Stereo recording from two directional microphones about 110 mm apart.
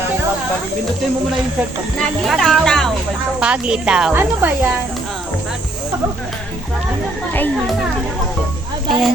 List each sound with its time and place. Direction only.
2.0 s speech: centre (ahead or behind)
3.4 s speech: 10° right (ahead or behind)
4.1 s speech: 20° right (ahead or behind)
8.9 s speech: centre (ahead or behind)